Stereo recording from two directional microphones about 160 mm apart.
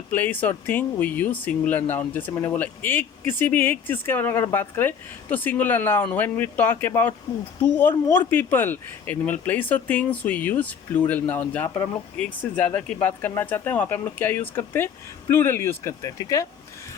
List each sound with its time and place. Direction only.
0.1 s speech: 10° left (ahead or behind)